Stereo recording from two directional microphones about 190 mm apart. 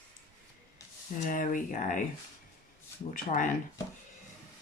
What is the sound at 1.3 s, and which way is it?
Speech, 45° left (ahead or behind).